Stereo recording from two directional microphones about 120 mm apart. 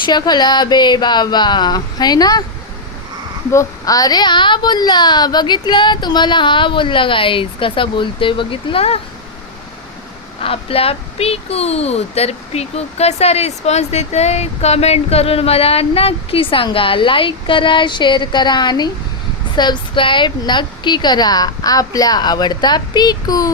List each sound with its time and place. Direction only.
0.0 s a child's voice: 35° left (ahead or behind)
3.5 s a child's voice: 25° left (ahead or behind); by 9.0 s 55° left (ahead or behind)
10.4 s a child's voice: 50° left (ahead or behind); by 23.5 s 35° left (ahead or behind)